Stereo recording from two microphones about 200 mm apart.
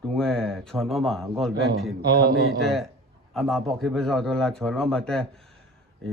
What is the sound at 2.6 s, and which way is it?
Speech, centre (ahead or behind).